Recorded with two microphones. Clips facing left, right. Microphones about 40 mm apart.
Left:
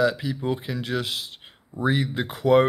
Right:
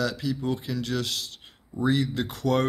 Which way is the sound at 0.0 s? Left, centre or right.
Centre.